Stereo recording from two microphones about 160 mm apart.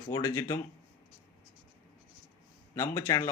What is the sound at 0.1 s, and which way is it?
Speech, 20° left (ahead or behind).